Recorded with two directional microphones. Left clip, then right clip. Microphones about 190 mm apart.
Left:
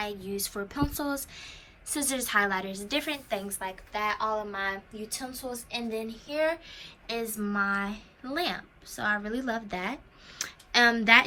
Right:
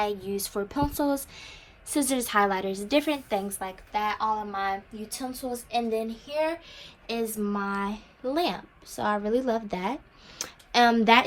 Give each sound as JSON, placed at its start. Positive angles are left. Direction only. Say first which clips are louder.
{"t": 0.0, "sound": "a woman's voice", "louder": "right 5 dB", "side_deg": -20}